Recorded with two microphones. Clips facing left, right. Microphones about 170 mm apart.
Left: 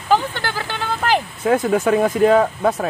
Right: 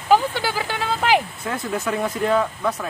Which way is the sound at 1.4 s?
70° left (ahead or behind).